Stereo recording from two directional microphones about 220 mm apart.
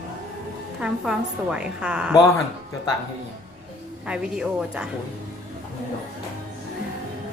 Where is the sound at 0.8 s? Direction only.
5° right (ahead or behind).